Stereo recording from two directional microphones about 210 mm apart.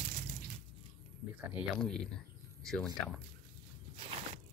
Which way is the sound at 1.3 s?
Centre (ahead or behind).